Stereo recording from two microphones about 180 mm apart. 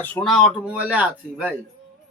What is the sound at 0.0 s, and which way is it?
Speech, 5° left (ahead or behind).